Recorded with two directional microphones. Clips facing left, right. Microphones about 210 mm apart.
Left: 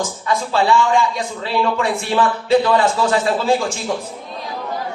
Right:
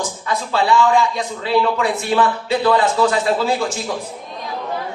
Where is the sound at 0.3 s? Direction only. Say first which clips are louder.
Left 1 dB; 30° left (ahead or behind).